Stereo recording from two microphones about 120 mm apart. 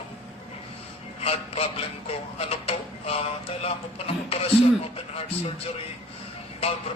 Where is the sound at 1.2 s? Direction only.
55° left (ahead or behind).